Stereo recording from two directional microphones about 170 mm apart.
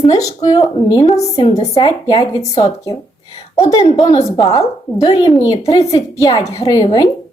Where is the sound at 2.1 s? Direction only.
30° left (ahead or behind).